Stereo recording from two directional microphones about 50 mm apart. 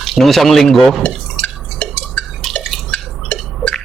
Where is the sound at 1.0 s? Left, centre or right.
Left.